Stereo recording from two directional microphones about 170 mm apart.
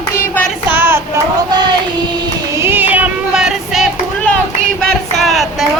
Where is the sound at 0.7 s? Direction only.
15° right (ahead or behind).